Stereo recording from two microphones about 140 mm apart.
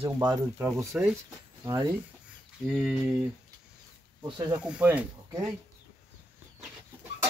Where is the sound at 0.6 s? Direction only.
20° right (ahead or behind).